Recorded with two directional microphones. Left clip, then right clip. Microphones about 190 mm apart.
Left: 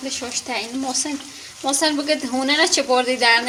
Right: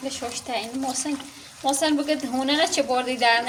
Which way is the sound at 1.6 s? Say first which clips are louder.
Left 2 dB; 20° left (ahead or behind).